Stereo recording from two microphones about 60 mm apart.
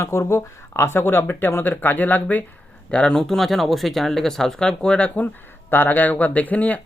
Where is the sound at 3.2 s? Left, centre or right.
Centre.